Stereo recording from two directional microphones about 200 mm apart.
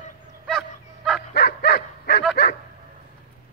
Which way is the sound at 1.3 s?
55° left (ahead or behind).